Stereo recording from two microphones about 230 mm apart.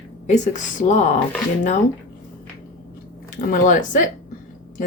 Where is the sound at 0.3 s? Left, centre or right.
Left.